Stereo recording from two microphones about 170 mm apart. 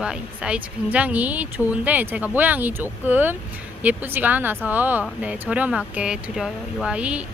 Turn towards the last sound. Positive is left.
turn(degrees=-5)  # may be behind; listen again after turning